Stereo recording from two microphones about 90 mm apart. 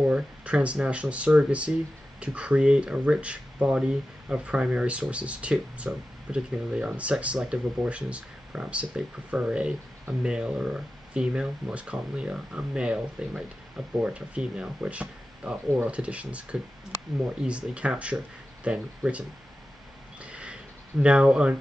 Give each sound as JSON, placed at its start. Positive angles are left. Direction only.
{"t": 0.0, "sound": "speech", "side_deg": -15}
{"t": 20.2, "sound": "a sound", "side_deg": -10}
{"t": 21.0, "sound": "speech", "side_deg": -10}